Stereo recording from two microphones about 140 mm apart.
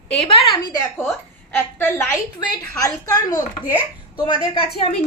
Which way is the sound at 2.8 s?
25° left (ahead or behind).